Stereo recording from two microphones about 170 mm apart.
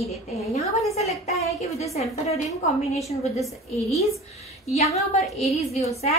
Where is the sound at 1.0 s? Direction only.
40° left (ahead or behind).